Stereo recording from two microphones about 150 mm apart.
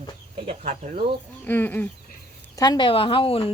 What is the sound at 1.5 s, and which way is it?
Speech, 15° left (ahead or behind).